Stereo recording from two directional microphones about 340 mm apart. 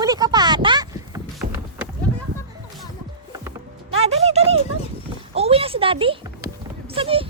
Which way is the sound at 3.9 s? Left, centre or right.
Centre.